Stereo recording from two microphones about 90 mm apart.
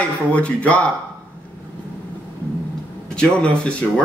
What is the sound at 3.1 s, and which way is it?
Speech, 10° left (ahead or behind).